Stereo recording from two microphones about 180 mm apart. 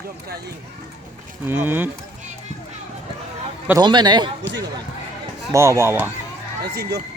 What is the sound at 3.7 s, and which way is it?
Speech, 20° right (ahead or behind).